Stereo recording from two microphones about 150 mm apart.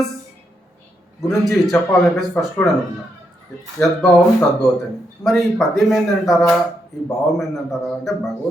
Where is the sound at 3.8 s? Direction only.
15° left (ahead or behind).